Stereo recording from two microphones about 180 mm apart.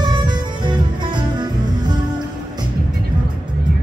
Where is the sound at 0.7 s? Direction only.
25° right (ahead or behind).